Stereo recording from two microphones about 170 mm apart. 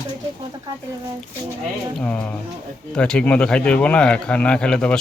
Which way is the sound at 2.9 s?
5° left (ahead or behind).